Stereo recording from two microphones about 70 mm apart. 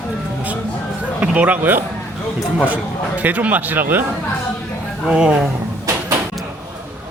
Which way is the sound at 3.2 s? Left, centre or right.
Right.